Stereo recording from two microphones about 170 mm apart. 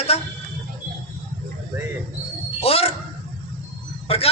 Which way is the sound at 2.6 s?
35° left (ahead or behind).